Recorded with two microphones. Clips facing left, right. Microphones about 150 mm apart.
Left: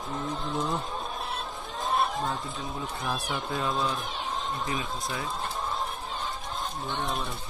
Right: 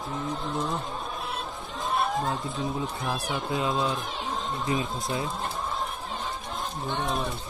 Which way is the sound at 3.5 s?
20° right (ahead or behind).